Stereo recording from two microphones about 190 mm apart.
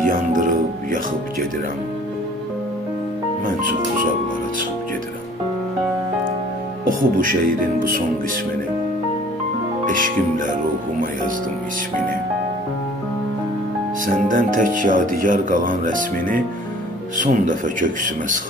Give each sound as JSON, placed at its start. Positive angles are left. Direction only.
{"t": 0.0, "sound": "music", "side_deg": -45}
{"t": 7.0, "sound": "speech", "side_deg": -45}
{"t": 9.8, "sound": "speech", "side_deg": -45}
{"t": 14.0, "sound": "speech", "side_deg": -45}